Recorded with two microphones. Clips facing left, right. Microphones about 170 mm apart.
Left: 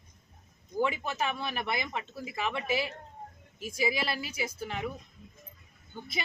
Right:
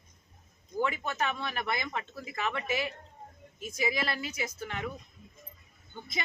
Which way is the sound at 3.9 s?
5° left (ahead or behind).